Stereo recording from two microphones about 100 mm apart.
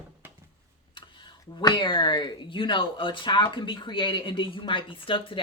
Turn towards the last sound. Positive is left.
turn(degrees=60)  # may be behind; listen again after turning